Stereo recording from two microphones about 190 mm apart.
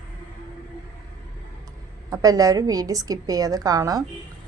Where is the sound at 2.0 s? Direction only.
20° right (ahead or behind).